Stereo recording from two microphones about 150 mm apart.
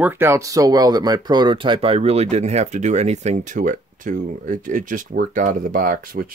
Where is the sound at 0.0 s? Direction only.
15° right (ahead or behind).